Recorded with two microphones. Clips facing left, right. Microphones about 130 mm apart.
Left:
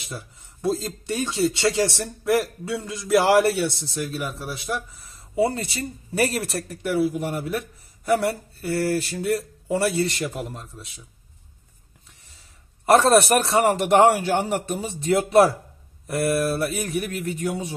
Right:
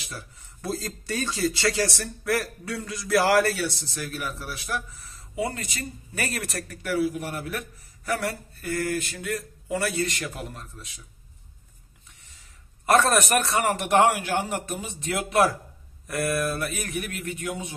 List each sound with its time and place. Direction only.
0.0 s speech: 25° left (ahead or behind)
12.8 s a man's voice: 30° left (ahead or behind)